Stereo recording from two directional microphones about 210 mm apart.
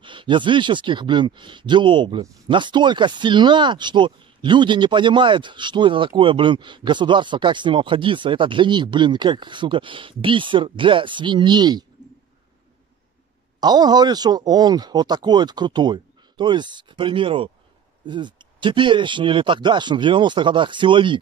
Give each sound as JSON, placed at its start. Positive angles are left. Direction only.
{"t": 0.0, "sound": "speech", "side_deg": -25}
{"t": 13.6, "sound": "speech", "side_deg": -20}